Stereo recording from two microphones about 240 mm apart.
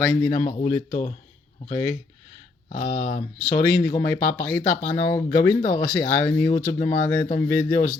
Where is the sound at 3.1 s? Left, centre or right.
Centre.